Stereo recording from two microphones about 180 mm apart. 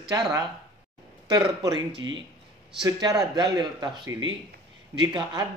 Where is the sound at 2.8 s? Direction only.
25° right (ahead or behind).